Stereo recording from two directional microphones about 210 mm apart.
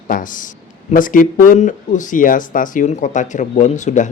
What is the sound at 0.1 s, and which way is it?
Speech, 40° left (ahead or behind).